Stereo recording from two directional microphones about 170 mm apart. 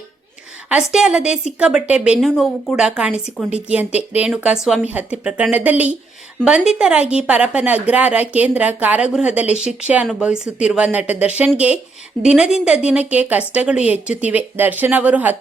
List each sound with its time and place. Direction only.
0.7 s a woman's voice: 5° right (ahead or behind)